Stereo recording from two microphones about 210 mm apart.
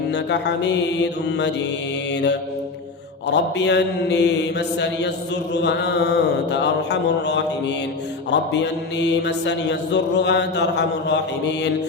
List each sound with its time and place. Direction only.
0.1 s mantra: 55° left (ahead or behind)
3.3 s mantra: 55° left (ahead or behind)